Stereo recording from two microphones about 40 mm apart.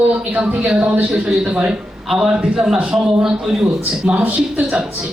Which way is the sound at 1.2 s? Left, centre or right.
Right.